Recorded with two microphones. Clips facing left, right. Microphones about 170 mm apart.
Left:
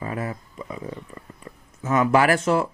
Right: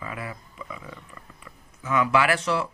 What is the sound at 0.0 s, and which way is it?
Speech, 40° left (ahead or behind).